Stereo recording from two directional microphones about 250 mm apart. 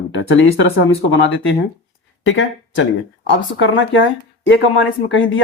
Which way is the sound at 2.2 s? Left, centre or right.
Left.